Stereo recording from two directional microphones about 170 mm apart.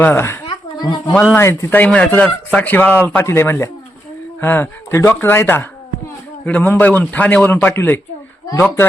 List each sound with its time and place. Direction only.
0.0 s a man's voice: 15° left (ahead or behind)
0.4 s a sound: 25° left (ahead or behind)
1.4 s a man's voice: 15° left (ahead or behind)